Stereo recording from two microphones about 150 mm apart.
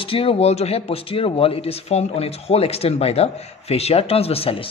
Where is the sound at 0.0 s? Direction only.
35° left (ahead or behind).